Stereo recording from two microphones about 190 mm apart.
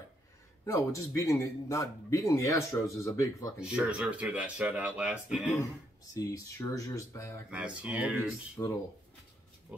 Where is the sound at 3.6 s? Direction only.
5° right (ahead or behind).